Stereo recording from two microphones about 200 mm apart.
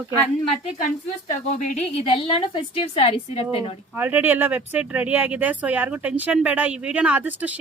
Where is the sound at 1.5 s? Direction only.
35° left (ahead or behind).